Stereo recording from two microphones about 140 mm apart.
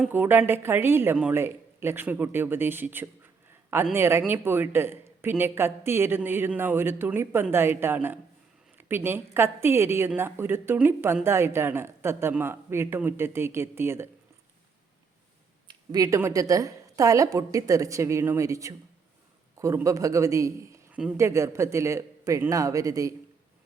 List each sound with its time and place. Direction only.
0.0 s speech: 15° right (ahead or behind)
15.6 s a woman's voice: 25° right (ahead or behind)